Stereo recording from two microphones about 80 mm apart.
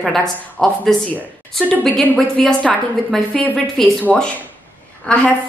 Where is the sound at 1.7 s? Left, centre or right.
Centre.